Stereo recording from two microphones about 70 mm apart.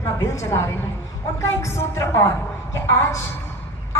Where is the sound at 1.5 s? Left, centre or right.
Left.